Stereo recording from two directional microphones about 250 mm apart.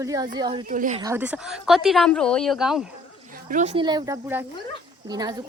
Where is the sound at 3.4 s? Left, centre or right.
Right.